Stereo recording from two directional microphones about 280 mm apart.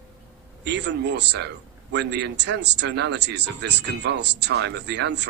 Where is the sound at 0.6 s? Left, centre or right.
Right.